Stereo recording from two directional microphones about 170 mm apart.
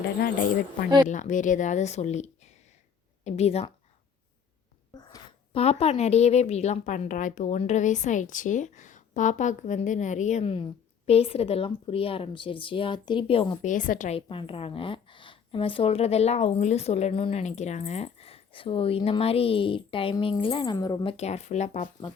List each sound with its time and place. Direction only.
0.2 s a woman's voice: 55° left (ahead or behind); by 3.7 s 40° left (ahead or behind)
5.5 s a woman's voice: 40° left (ahead or behind)
13.6 s speech: 50° left (ahead or behind)
14.2 s a woman's voice: 30° left (ahead or behind)